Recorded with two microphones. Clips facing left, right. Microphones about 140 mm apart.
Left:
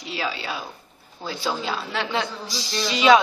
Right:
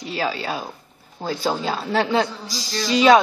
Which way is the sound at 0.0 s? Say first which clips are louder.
Right 4 dB; 45° right (ahead or behind).